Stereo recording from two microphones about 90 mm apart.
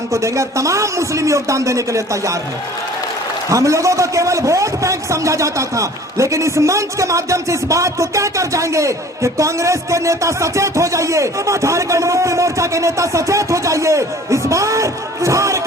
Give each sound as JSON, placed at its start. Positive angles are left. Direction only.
{"t": 0.1, "sound": "a man's voice", "side_deg": -35}
{"t": 3.5, "sound": "a man's voice", "side_deg": -35}